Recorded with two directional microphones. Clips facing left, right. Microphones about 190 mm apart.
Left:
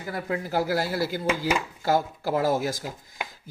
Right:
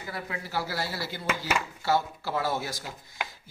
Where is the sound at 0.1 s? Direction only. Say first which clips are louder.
Left 7 dB; 45° left (ahead or behind).